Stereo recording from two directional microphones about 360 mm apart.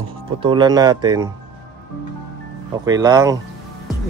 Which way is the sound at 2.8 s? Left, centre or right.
Centre.